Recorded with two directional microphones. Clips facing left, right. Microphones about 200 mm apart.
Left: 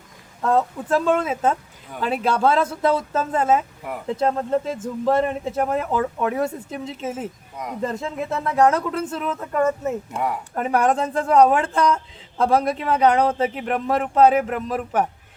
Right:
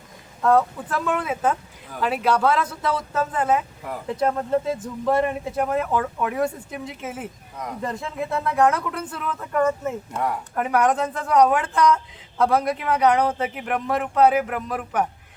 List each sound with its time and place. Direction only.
0.4 s speech: 25° left (ahead or behind)
10.1 s speech: 10° left (ahead or behind)
10.5 s speech: 30° left (ahead or behind)